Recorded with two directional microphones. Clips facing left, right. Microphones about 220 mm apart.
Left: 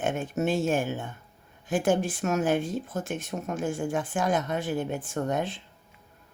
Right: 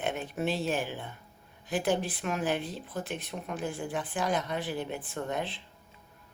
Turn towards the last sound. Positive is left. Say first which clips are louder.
# left 5 dB
turn(degrees=45)  # may be behind; listen again after turning